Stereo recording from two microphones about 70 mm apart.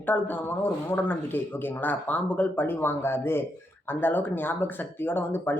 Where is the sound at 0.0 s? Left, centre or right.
Left.